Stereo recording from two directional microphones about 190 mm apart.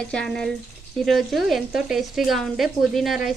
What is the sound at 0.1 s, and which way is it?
Speech, 5° left (ahead or behind).